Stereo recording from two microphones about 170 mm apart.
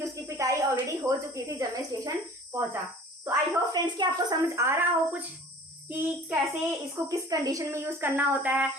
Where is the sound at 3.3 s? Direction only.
25° right (ahead or behind).